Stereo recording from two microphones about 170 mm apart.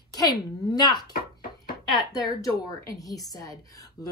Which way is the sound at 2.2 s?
20° left (ahead or behind).